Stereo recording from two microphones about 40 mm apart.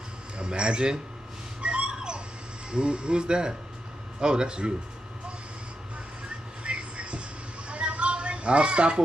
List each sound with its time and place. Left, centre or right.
0.4 s speech: right
1.6 s dog: right
2.7 s speech: right
6.6 s a sound: right